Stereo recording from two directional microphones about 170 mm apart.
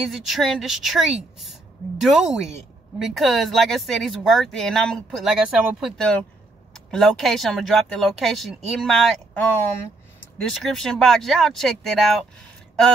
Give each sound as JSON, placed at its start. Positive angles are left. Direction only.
{"t": 0.0, "sound": "speech", "side_deg": 0}
{"t": 10.5, "sound": "speech", "side_deg": 0}